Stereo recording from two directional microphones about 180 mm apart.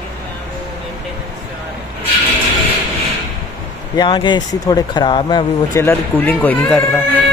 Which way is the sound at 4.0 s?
25° left (ahead or behind).